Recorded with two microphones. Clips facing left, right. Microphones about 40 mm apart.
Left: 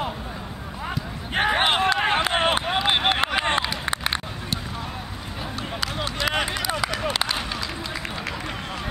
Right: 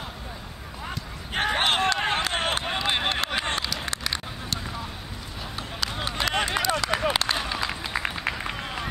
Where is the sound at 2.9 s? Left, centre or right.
Left.